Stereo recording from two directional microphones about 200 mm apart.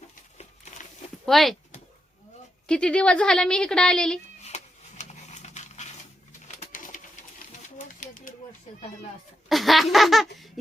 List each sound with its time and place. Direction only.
1.2 s speech: centre (ahead or behind)
2.6 s a woman's voice: 5° left (ahead or behind)
4.4 s a sound: 35° left (ahead or behind)
6.6 s pigeon: 40° left (ahead or behind)
8.0 s a sound: 40° left (ahead or behind)
9.5 s baby laughter: centre (ahead or behind)